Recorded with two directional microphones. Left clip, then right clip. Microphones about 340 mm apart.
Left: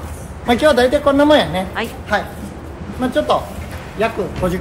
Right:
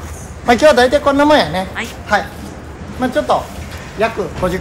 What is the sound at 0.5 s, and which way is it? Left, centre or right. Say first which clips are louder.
Speech: right 4 dB; centre.